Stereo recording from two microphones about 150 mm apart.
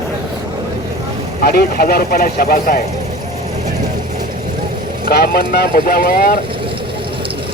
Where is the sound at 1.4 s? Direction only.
90° left; by 2.8 s 75° left (ahead or behind).